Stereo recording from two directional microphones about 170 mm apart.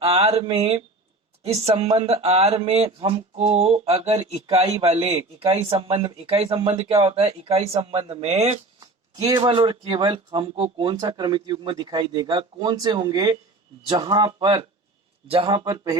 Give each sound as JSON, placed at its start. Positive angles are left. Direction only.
{"t": 0.0, "sound": "speech", "side_deg": -35}
{"t": 9.1, "sound": "speech", "side_deg": -25}